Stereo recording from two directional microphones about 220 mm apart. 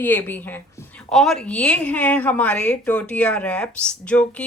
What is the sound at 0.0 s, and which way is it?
A woman's voice, 10° left (ahead or behind).